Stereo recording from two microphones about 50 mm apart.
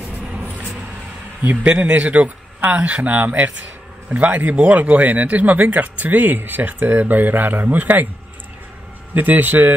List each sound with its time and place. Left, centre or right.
0.0 s a sound: right
1.4 s speech: right
1.7 s a man's voice: right
9.1 s speech: right